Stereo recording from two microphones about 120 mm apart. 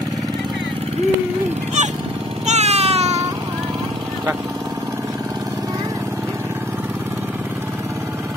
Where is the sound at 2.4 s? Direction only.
65° right (ahead or behind).